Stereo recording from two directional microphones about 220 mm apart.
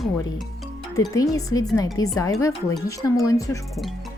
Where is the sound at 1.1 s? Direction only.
15° left (ahead or behind).